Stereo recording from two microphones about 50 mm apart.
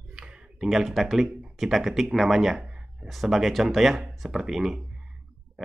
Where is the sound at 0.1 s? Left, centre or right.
Centre.